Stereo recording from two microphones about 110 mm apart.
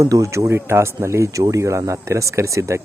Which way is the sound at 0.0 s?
25° right (ahead or behind).